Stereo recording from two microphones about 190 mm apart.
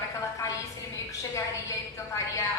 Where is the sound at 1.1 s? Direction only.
15° left (ahead or behind).